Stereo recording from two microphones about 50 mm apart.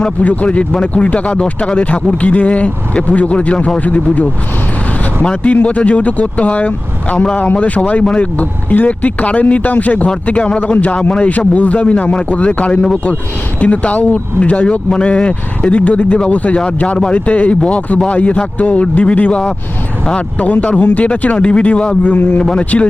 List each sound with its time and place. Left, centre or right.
0.0 s speech: left
5.4 s speech: left
20.4 s speech: left